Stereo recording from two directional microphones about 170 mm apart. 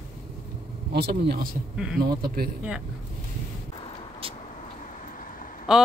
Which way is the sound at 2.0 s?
60° right (ahead or behind).